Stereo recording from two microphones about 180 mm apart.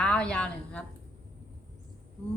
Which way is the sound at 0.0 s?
5° left (ahead or behind).